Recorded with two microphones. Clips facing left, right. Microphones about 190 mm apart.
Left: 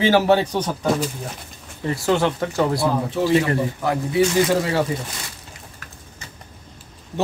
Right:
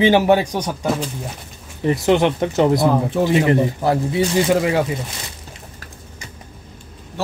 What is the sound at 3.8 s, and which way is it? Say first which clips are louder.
Speech: right 1 dB; 30° right (ahead or behind).